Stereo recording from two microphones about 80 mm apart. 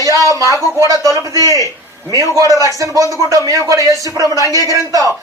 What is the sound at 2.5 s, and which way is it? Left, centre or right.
Speech, left.